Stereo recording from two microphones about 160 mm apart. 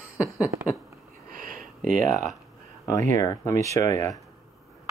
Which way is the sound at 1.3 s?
60° right (ahead or behind).